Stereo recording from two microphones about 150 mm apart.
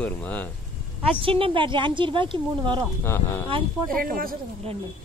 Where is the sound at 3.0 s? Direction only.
15° left (ahead or behind).